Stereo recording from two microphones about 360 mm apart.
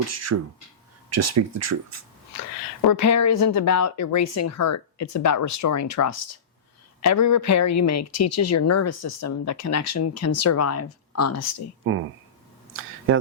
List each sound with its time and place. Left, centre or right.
0.1 s speech: right
2.8 s speech: left
11.9 s speech: right